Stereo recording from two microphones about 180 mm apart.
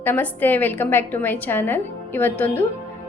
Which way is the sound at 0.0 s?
10° left (ahead or behind).